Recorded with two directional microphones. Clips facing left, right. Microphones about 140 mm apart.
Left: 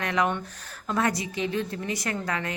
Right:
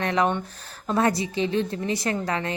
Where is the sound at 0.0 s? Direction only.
30° right (ahead or behind).